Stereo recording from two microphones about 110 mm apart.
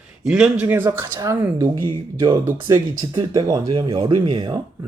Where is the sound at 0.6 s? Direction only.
20° right (ahead or behind).